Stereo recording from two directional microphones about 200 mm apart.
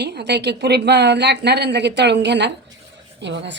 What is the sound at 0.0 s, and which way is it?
Speech, 55° right (ahead or behind).